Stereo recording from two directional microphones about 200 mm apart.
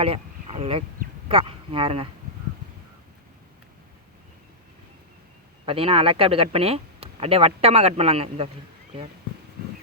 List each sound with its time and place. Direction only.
0.0 s a sound: 30° right (ahead or behind)
1.3 s speech: 25° right (ahead or behind)
5.6 s speech: 30° right (ahead or behind)